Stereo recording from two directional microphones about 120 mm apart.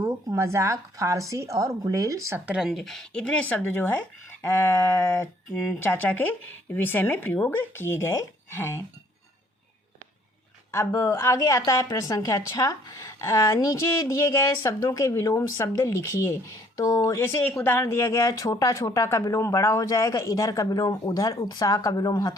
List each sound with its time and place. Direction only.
0.0 s speech: 20° right (ahead or behind)
2.5 s speech: 5° right (ahead or behind); by 8.8 s 20° left (ahead or behind)
10.7 s speech: 25° left (ahead or behind)
17.2 s speech: 20° left (ahead or behind)